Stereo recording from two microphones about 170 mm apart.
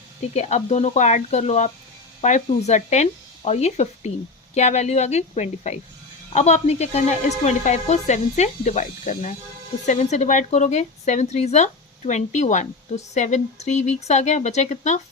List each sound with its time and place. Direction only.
0.3 s speech: 40° left (ahead or behind)